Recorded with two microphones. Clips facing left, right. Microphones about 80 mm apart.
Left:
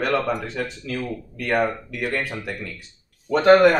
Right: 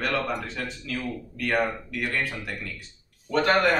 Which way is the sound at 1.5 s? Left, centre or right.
Centre.